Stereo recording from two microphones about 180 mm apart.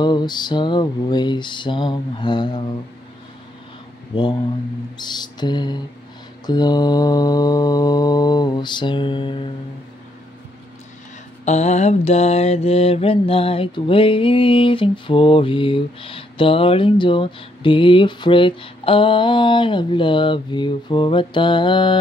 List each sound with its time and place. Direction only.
0.0 s mantra: 25° left (ahead or behind)
4.1 s speech: 25° left (ahead or behind)
4.9 s mantra: 25° left (ahead or behind)
11.4 s mantra: 40° left (ahead or behind)